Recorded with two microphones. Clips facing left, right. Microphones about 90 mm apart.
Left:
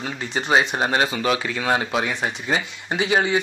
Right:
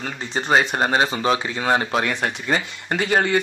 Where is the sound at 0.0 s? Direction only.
35° right (ahead or behind).